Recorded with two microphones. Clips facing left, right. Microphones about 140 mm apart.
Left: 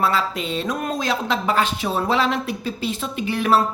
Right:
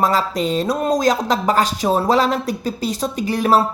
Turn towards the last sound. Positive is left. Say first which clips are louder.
# right 3 dB
turn(degrees=-40)  # may be behind; listen again after turning